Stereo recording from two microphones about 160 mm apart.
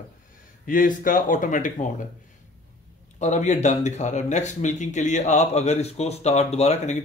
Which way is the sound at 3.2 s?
45° left (ahead or behind).